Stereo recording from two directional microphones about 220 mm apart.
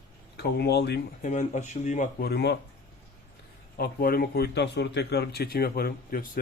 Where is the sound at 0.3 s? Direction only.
50° left (ahead or behind).